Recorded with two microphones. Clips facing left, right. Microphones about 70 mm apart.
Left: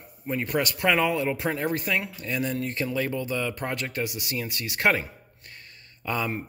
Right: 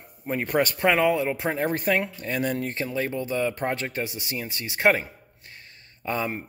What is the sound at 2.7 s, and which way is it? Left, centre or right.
Speech, right.